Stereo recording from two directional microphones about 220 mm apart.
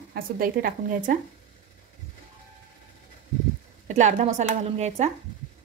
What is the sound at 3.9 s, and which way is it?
A woman's voice, 35° right (ahead or behind).